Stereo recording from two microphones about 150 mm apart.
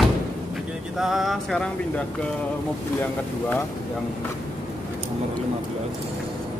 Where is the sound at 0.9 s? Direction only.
Centre (ahead or behind).